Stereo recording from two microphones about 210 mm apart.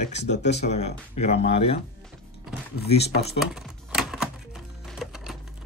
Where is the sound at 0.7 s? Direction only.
30° left (ahead or behind).